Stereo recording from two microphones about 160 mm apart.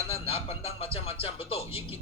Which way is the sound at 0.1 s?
35° left (ahead or behind).